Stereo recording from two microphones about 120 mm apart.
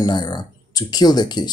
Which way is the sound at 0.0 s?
35° left (ahead or behind).